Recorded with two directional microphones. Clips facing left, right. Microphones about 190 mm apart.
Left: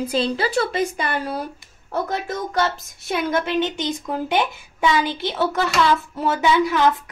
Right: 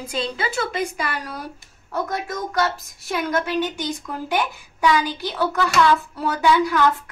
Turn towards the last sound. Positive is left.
turn(degrees=20)  # may be behind; listen again after turning